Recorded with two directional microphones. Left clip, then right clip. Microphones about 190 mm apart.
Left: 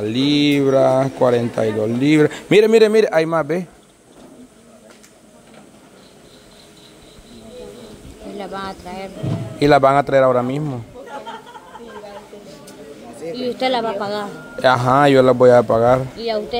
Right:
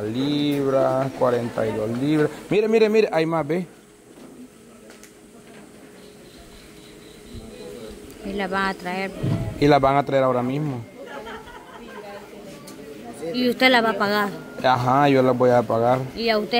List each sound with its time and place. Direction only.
0.0 s speech: 30° left (ahead or behind)
2.8 s speech: 15° left (ahead or behind)
8.4 s speech: 55° right (ahead or behind)
9.6 s speech: 15° left (ahead or behind)
13.3 s speech: 55° right (ahead or behind)
14.6 s speech: 20° left (ahead or behind)
16.2 s speech: 55° right (ahead or behind)